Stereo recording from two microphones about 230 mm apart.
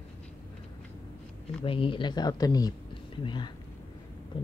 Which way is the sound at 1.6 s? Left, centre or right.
Left.